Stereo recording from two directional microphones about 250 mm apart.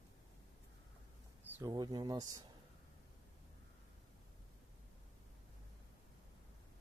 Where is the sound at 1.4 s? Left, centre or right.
Centre.